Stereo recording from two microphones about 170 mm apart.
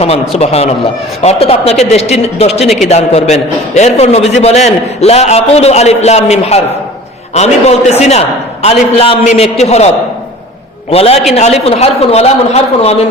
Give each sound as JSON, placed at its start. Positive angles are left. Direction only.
{"t": 0.3, "sound": "a man's voice", "side_deg": 35}
{"t": 2.6, "sound": "a woman's voice", "side_deg": 0}
{"t": 2.9, "sound": "a man's voice", "side_deg": 40}